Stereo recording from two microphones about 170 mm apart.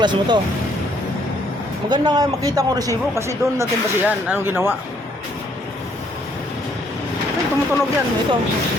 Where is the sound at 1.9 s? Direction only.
25° right (ahead or behind).